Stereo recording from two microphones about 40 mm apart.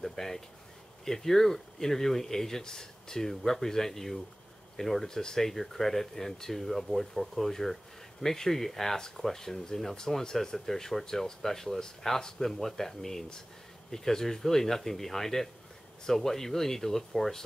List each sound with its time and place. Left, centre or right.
0.0 s speech: centre